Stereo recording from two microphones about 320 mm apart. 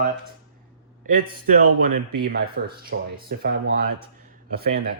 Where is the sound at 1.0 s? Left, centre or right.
Right.